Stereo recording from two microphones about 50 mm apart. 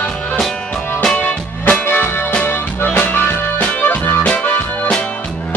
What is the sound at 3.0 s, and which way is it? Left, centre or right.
Music, left.